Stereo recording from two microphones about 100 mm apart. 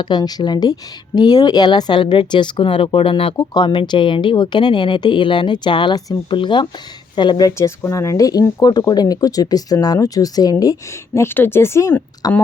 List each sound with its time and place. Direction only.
0.0 s speech: 45° left (ahead or behind); by 3.3 s 65° left (ahead or behind)
3.3 s speech: 45° left (ahead or behind)
3.8 s speech: 55° left (ahead or behind); by 12.0 s 25° left (ahead or behind)
12.2 s speech: 40° left (ahead or behind)